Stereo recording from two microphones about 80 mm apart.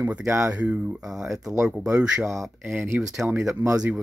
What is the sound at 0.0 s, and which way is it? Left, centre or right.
Speech, right.